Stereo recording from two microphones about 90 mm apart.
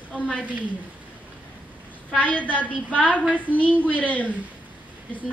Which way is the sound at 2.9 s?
15° left (ahead or behind).